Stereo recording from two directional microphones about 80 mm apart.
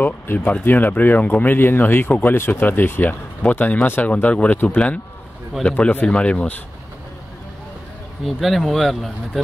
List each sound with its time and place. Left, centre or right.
0.0 s speech: left
8.4 s speech: centre